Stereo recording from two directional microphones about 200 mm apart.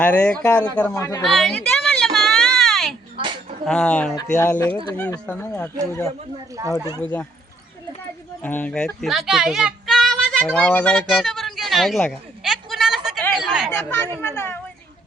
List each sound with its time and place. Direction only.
0.0 s a man's voice: 5° left (ahead or behind)
1.2 s a sound: centre (ahead or behind)
3.7 s speech: 5° left (ahead or behind)
4.1 s a man's voice: 15° left (ahead or behind)
4.9 s a man's voice: 5° left (ahead or behind)
6.6 s speech: 15° right (ahead or behind)
7.0 s a man's voice: 5° left (ahead or behind)
8.4 s speech: 10° left (ahead or behind)
13.3 s chatter: centre (ahead or behind)
13.7 s speech: 10° left (ahead or behind)
14.2 s a sound: 10° left (ahead or behind)